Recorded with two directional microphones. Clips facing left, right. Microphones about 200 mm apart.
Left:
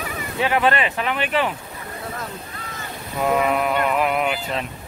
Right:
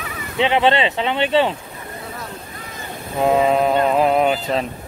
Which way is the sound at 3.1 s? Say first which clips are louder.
Right 4 dB; 25° right (ahead or behind).